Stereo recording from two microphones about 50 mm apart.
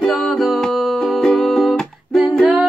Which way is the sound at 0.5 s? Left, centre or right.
Centre.